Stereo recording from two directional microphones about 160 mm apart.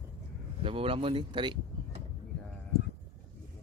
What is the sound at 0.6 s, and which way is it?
Speech, 35° right (ahead or behind).